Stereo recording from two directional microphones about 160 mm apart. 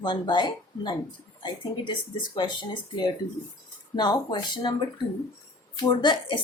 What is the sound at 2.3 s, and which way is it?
A woman's voice, 30° left (ahead or behind).